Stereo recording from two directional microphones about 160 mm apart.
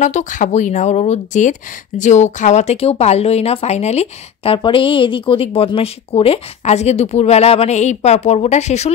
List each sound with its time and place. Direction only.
0.0 s speech: 50° left (ahead or behind)